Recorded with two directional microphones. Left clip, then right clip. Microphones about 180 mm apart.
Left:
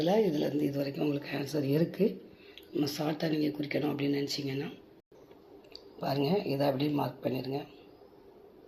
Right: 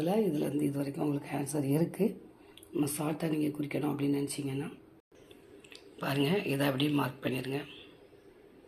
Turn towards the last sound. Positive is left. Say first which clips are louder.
# left 1 dB
turn(degrees=-60)  # may be behind; listen again after turning